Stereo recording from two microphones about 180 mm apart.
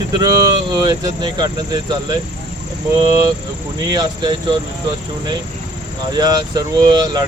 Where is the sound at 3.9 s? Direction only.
20° right (ahead or behind).